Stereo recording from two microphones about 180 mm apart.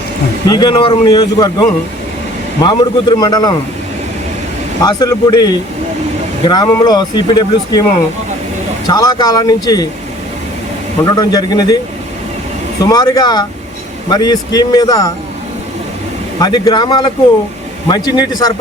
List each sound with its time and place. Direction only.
0.4 s speech: 25° left (ahead or behind)
4.8 s speech: 20° left (ahead or behind)
8.9 s speech: 20° left (ahead or behind)
11.2 s speech: 20° left (ahead or behind)
12.8 s speech: 20° left (ahead or behind)
16.4 s speech: 20° left (ahead or behind)